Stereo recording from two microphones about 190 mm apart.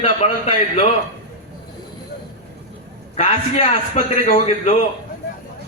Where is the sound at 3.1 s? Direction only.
35° left (ahead or behind).